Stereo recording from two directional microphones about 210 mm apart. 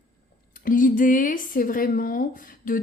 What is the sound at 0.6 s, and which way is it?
Speech, 40° left (ahead or behind).